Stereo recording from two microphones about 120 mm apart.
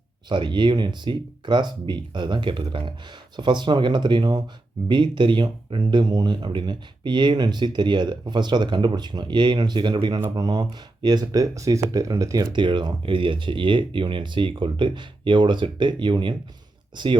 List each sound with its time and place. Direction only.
0.3 s speech: 40° right (ahead or behind)